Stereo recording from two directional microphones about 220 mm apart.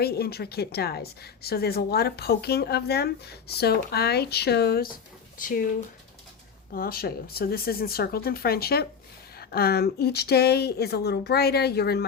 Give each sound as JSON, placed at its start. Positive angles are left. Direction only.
{"t": 0.0, "sound": "a woman's voice", "side_deg": 45}
{"t": 6.7, "sound": "a woman's voice", "side_deg": 45}